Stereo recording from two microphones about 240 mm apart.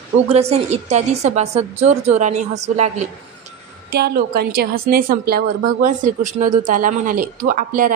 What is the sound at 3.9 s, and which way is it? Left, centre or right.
A woman's voice, right.